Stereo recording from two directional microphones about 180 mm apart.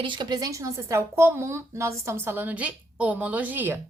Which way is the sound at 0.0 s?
25° right (ahead or behind).